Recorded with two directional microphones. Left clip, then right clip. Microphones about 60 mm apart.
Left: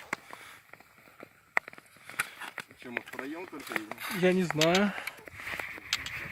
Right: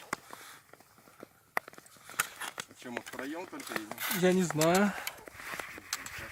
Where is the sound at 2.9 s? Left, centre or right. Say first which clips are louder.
Left 3 dB; centre.